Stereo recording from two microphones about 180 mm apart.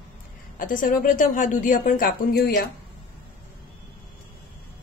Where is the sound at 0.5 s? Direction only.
50° left (ahead or behind).